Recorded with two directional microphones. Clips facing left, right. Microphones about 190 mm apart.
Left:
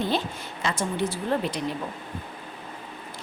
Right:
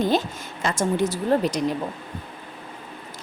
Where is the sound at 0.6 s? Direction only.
45° right (ahead or behind).